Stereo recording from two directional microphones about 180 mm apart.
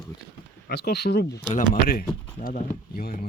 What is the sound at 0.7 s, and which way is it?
Speech, 65° left (ahead or behind).